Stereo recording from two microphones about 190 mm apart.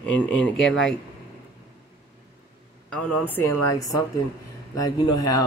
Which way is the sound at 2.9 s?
10° left (ahead or behind).